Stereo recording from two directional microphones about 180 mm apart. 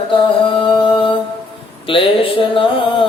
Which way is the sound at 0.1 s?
25° left (ahead or behind).